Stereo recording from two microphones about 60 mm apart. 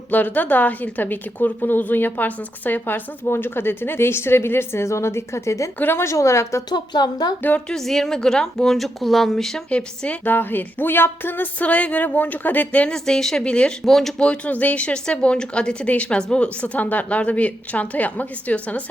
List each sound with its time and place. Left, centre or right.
0.1 s a woman's voice: left
5.8 s a woman's voice: left
6.1 s a woman's voice: left
7.7 s a woman's voice: centre
9.6 s speech: centre
10.2 s a woman's voice: left
12.9 s speech: centre
14.2 s speech: centre